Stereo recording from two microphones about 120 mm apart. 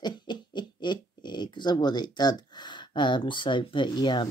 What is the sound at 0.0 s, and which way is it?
Speech, 40° left (ahead or behind).